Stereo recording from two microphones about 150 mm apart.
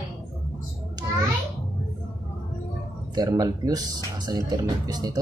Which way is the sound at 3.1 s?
25° right (ahead or behind).